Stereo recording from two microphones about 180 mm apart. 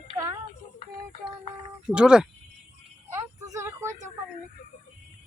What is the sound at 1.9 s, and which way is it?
Speech, 5° right (ahead or behind).